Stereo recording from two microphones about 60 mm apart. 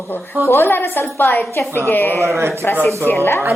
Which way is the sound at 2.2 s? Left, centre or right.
Right.